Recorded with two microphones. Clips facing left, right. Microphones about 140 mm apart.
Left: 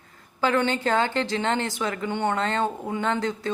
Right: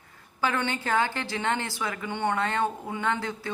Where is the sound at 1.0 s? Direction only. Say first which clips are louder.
Left 4 dB; 20° left (ahead or behind).